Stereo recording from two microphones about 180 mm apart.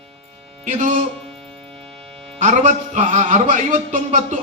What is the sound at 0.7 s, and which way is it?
Speech, 40° right (ahead or behind).